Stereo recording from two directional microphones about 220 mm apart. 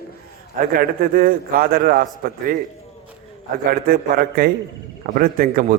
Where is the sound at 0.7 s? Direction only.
40° right (ahead or behind).